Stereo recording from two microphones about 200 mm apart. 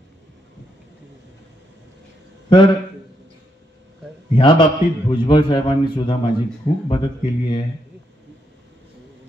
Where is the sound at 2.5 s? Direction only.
25° left (ahead or behind).